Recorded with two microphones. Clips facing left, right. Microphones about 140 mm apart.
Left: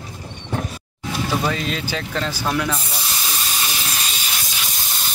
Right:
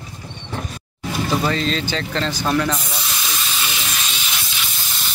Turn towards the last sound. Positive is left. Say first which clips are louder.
# right 1 dB
turn(degrees=5)  # may be behind; listen again after turning